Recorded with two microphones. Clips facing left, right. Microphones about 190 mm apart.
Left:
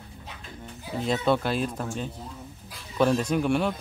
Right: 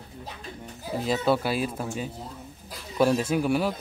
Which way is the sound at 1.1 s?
5° right (ahead or behind).